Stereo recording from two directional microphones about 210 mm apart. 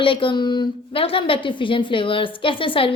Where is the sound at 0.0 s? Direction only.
25° left (ahead or behind).